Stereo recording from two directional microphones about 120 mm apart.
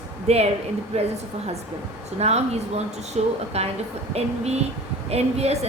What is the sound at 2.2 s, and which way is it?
A woman's voice, 65° right (ahead or behind).